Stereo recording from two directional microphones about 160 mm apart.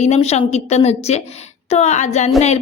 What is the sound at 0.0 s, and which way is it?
A woman's voice, 45° left (ahead or behind).